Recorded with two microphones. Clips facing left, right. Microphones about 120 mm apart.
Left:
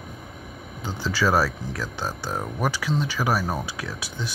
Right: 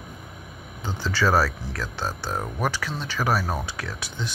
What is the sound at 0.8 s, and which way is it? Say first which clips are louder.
Speech: even; 5° left (ahead or behind).